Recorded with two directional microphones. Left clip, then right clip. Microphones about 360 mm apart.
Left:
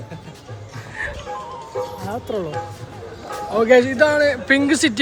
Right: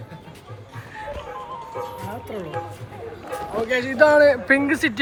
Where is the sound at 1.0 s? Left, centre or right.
Left.